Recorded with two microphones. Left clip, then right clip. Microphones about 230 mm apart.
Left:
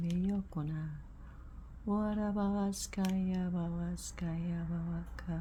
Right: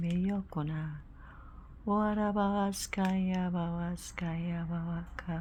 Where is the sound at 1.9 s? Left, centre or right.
Centre.